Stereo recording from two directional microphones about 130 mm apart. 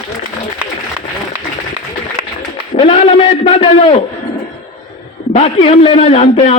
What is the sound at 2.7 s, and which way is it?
A man's voice, 45° left (ahead or behind).